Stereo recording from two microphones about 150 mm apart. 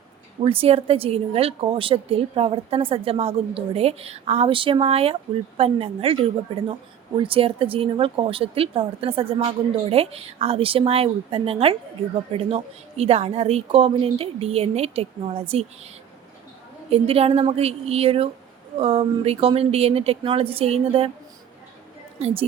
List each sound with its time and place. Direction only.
0.4 s a woman's voice: 40° right (ahead or behind)
7.2 s a woman's voice: 35° right (ahead or behind)
16.9 s a woman's voice: 40° right (ahead or behind)
22.2 s a woman's voice: 40° right (ahead or behind)